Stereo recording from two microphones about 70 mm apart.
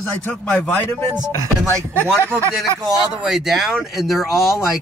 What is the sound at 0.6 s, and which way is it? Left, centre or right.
Speech, left.